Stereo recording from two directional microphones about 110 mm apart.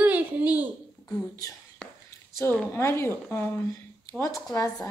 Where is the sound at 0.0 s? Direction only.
15° right (ahead or behind).